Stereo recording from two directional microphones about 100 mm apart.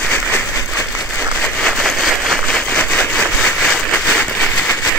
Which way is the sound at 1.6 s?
5° left (ahead or behind).